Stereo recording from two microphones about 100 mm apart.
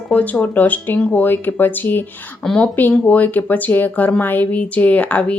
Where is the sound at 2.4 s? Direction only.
5° left (ahead or behind).